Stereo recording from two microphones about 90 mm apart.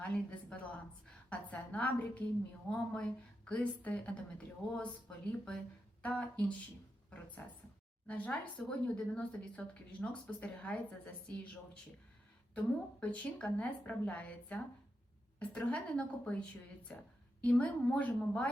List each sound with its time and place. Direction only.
0.0 s a woman's voice: 15° left (ahead or behind)
13.0 s a woman's voice: 15° left (ahead or behind)
17.4 s a woman's voice: 15° left (ahead or behind)